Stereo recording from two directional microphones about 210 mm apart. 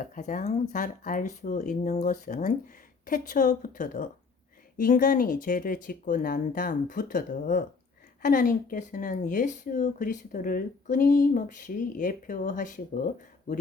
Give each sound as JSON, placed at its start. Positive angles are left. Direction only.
{"t": 0.0, "sound": "speech", "side_deg": 40}